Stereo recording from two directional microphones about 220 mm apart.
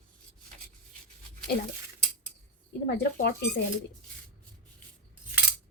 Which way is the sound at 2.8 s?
50° left (ahead or behind).